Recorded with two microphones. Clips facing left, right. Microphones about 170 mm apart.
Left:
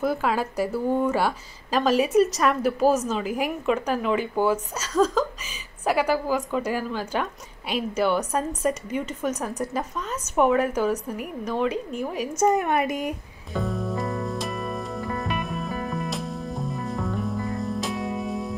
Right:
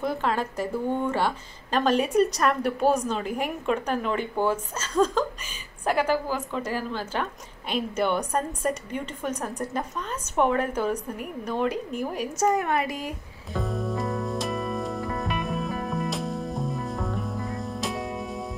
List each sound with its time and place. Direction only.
0.0 s a woman's voice: 10° left (ahead or behind)
12.4 s a woman's voice: 20° left (ahead or behind)
13.5 s music: centre (ahead or behind)